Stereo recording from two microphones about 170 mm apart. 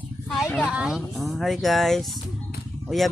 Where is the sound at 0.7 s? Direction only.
5° right (ahead or behind).